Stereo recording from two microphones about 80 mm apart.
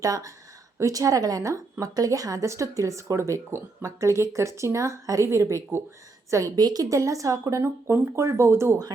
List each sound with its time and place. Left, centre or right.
0.0 s speech: right